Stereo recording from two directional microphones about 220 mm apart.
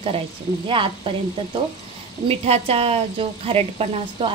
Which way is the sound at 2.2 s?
25° right (ahead or behind).